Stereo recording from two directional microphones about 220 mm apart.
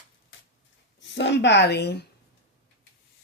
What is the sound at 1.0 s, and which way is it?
A woman's voice, 55° left (ahead or behind).